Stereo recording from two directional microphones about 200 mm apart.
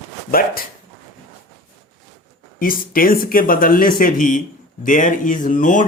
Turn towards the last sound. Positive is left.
turn(degrees=40)  # may be behind; listen again after turning